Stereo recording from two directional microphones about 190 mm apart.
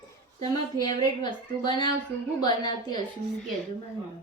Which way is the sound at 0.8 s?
20° left (ahead or behind).